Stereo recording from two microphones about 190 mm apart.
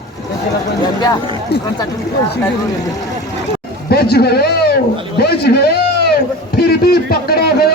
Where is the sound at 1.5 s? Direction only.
60° left (ahead or behind).